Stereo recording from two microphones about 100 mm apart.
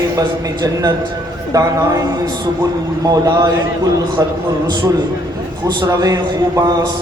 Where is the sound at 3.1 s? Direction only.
40° right (ahead or behind).